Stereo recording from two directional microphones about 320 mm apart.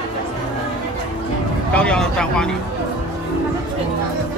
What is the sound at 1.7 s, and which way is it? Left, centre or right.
Speech, centre.